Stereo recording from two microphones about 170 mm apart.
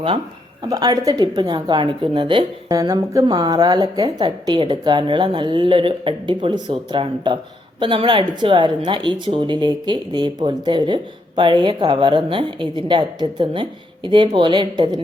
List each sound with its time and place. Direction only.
0.7 s speech: 20° right (ahead or behind)